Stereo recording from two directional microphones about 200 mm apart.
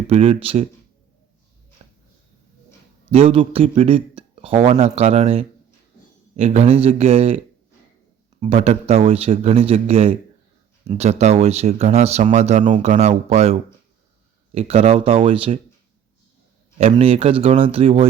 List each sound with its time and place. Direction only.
0.1 s speech: 30° right (ahead or behind)
1.8 s a sound: 30° right (ahead or behind)
3.1 s speech: 30° right (ahead or behind)
16.7 s speech: 30° right (ahead or behind)